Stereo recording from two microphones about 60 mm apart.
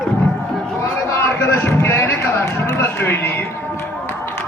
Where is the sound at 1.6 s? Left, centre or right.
Left.